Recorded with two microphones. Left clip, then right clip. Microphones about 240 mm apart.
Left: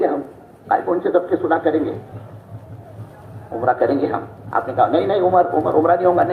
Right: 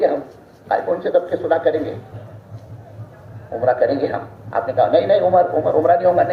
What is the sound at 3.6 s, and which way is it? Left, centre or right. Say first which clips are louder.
A man's voice: right 1 dB; right.